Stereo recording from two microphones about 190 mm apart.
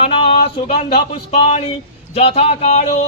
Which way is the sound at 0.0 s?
30° left (ahead or behind).